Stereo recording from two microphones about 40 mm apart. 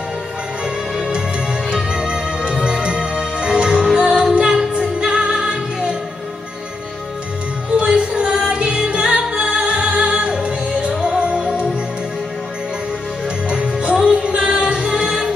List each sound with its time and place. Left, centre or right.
0.9 s music: right
7.7 s music: right
13.5 s music: right